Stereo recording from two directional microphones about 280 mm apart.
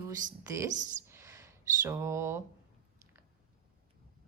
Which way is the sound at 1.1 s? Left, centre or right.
Centre.